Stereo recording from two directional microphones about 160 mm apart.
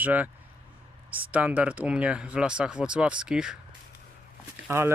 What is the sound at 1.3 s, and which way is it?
Speech, 10° right (ahead or behind).